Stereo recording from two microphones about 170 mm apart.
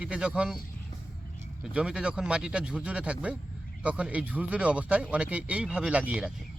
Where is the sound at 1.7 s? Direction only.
5° right (ahead or behind).